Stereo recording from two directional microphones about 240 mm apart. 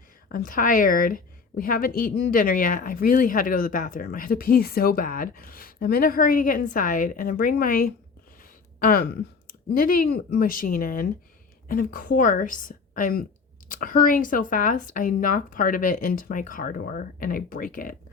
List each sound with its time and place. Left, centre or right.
0.3 s a woman's voice: left